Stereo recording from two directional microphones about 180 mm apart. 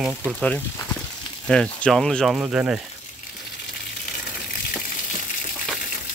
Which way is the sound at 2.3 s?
10° right (ahead or behind).